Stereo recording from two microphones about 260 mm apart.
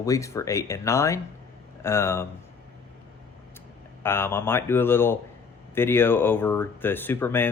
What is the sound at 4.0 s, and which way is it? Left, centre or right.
Speech, centre.